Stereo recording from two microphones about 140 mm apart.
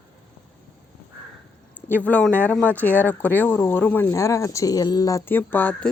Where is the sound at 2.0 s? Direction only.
10° left (ahead or behind).